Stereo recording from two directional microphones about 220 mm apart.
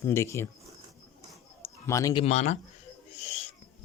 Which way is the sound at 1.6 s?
15° left (ahead or behind).